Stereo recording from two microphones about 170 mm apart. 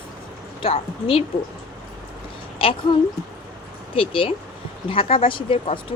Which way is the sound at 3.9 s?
30° left (ahead or behind).